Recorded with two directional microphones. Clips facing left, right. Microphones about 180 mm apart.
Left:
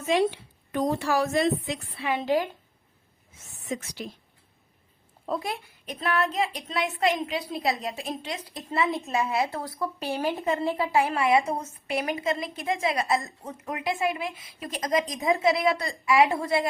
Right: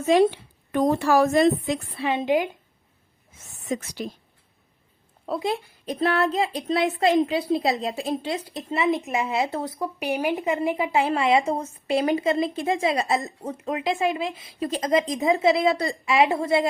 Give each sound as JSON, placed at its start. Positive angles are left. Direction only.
{"t": 0.0, "sound": "speech", "side_deg": -40}
{"t": 0.7, "sound": "a woman's voice", "side_deg": -55}
{"t": 2.0, "sound": "a woman's voice", "side_deg": -20}
{"t": 3.7, "sound": "a woman's voice", "side_deg": -45}
{"t": 5.4, "sound": "a woman's voice", "side_deg": -30}